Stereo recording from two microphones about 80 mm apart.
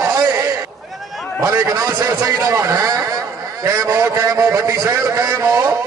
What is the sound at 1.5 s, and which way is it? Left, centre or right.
A man's voice, right.